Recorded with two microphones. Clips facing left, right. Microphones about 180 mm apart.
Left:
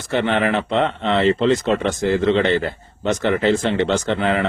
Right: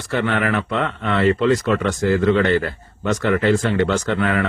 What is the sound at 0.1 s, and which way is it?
Speech, 25° left (ahead or behind).